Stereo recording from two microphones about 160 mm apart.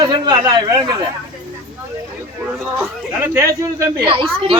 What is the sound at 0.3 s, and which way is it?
Speech, 25° right (ahead or behind).